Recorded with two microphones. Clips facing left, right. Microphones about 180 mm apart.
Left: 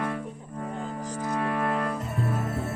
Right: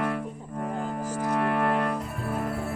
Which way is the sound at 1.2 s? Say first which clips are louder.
Right 2 dB; 65° right (ahead or behind).